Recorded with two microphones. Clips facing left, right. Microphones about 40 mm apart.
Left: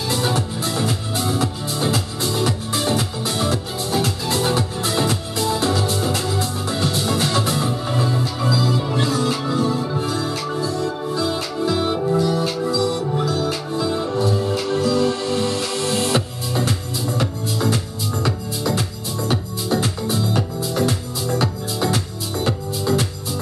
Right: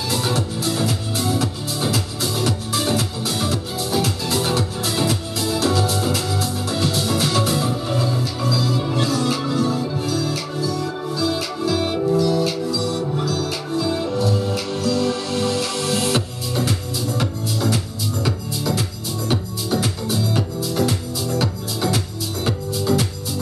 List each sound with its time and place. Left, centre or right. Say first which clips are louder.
0.1 s music: left 1 dB; centre
11.1 s music: right 2 dB; centre
18.2 s music: left 1 dB; centre